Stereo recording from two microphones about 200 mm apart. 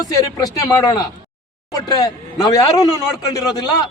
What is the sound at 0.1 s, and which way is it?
A man's voice, 20° left (ahead or behind).